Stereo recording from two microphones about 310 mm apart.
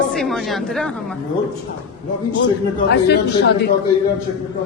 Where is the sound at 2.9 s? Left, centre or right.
Left.